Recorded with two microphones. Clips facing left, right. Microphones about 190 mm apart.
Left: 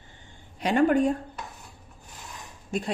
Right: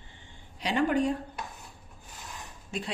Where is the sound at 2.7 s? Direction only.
45° left (ahead or behind).